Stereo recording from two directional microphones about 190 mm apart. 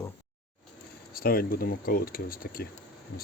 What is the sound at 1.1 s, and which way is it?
Speech, 50° left (ahead or behind).